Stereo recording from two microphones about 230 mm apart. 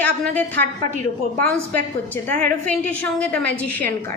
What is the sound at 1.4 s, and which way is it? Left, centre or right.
A woman's voice, centre.